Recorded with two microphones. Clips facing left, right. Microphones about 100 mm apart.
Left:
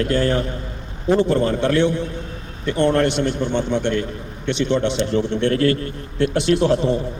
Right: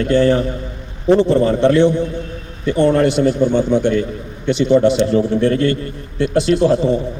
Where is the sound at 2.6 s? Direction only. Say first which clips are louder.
Right 4 dB; centre (ahead or behind).